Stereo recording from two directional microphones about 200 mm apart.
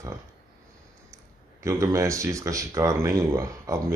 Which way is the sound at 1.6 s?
15° right (ahead or behind).